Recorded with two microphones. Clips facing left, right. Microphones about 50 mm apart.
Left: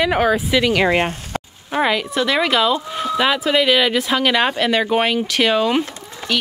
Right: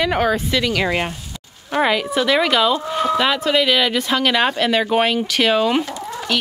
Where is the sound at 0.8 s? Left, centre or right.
Left.